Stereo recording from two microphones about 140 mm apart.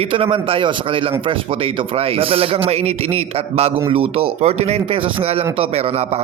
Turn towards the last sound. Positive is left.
turn(degrees=-45)  # may be behind; listen again after turning